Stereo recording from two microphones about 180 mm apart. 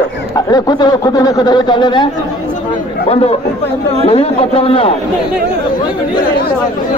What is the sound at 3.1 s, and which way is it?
Speech, 35° left (ahead or behind).